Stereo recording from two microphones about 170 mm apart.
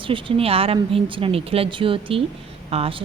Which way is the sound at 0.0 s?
30° right (ahead or behind).